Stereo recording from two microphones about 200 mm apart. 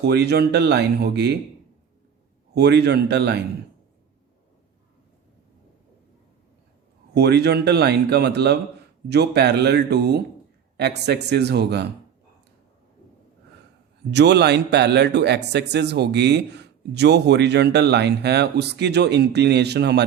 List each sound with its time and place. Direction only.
0.0 s speech: 55° right (ahead or behind)
2.6 s speech: 55° right (ahead or behind)
7.1 s speech: 55° right (ahead or behind)
14.1 s speech: 55° right (ahead or behind)